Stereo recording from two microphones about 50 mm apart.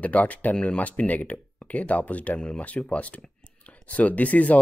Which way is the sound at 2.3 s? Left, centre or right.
Centre.